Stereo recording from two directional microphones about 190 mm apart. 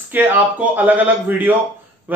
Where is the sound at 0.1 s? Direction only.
10° right (ahead or behind).